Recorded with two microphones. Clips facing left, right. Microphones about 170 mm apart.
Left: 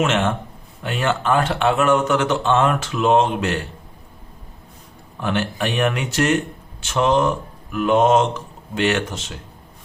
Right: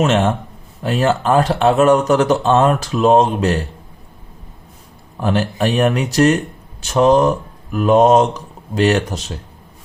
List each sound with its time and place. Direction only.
0.0 s speech: 35° right (ahead or behind)
5.2 s speech: 35° right (ahead or behind)